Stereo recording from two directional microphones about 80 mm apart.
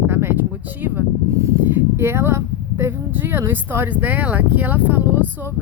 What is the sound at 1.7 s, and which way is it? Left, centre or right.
Speech, right.